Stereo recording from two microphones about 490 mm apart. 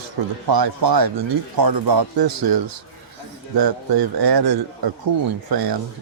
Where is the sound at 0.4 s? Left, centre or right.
Right.